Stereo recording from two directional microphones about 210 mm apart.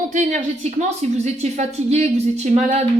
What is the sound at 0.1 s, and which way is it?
A woman's voice, 35° right (ahead or behind).